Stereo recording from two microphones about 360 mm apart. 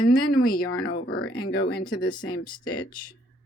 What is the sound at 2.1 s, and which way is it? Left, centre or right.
Speech, centre.